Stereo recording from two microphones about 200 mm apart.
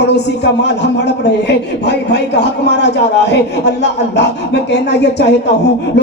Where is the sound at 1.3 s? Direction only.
60° left (ahead or behind).